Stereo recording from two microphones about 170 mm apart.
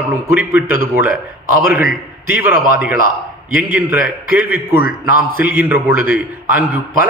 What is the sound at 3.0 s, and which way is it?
Speech, 50° right (ahead or behind).